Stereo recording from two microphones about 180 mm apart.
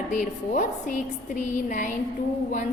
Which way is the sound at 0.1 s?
45° left (ahead or behind).